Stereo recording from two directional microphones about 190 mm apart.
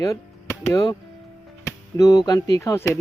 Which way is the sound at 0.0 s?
15° left (ahead or behind).